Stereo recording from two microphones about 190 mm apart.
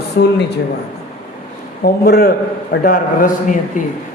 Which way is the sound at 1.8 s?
55° left (ahead or behind).